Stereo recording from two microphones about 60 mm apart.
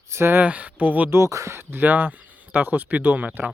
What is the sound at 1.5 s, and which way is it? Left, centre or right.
Speech, right.